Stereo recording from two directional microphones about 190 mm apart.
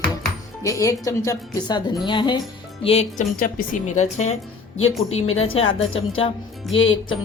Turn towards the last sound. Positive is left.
turn(degrees=90)